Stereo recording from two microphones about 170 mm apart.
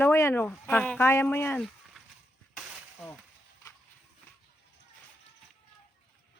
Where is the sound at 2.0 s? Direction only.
Centre (ahead or behind).